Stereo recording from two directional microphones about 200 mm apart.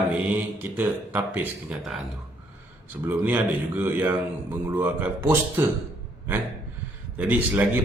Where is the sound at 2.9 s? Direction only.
10° right (ahead or behind).